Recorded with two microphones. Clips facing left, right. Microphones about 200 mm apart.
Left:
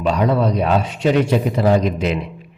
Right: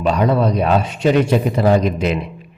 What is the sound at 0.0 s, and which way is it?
A man's voice, 50° right (ahead or behind).